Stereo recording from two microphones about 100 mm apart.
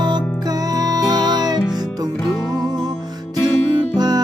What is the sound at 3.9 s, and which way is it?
Music, 45° right (ahead or behind).